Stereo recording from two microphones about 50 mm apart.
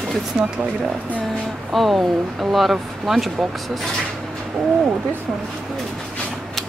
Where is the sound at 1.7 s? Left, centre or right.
Centre.